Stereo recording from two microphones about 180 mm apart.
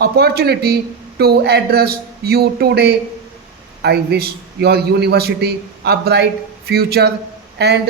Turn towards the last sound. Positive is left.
turn(degrees=-65)  # may be behind; listen again after turning